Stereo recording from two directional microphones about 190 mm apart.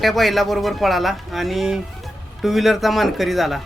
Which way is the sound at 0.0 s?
Centre (ahead or behind).